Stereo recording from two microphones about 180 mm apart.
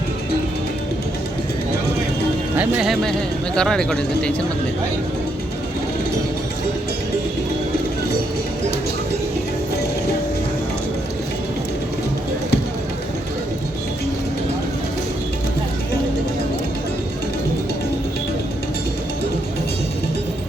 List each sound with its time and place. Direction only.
2.6 s speech: 5° right (ahead or behind)